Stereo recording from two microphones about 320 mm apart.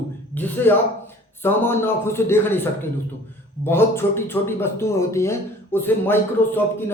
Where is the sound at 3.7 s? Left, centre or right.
Centre.